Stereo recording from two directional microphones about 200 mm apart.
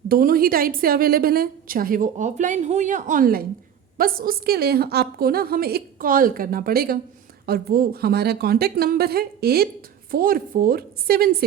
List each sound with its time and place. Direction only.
0.1 s a woman's voice: 45° right (ahead or behind)